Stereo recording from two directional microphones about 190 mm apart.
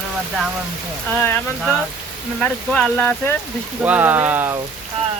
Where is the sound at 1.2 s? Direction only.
10° left (ahead or behind).